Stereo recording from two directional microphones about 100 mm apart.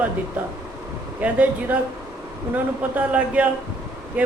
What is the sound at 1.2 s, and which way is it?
Speech, 15° right (ahead or behind).